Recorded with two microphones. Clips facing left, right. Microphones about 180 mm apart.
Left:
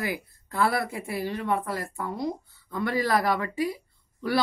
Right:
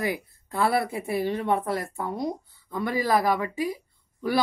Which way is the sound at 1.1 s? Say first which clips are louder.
Right 3 dB; 25° right (ahead or behind).